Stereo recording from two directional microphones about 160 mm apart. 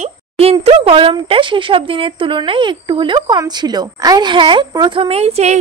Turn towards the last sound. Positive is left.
turn(degrees=-40)  # may be behind; listen again after turning